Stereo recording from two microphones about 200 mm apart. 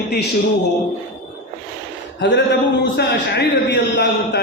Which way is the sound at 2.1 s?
60° left (ahead or behind).